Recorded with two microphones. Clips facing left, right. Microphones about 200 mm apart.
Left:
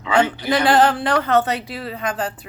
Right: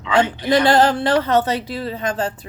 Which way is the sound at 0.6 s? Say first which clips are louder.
Left 2 dB; 40° right (ahead or behind).